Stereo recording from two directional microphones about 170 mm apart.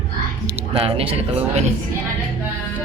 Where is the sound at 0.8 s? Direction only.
35° right (ahead or behind).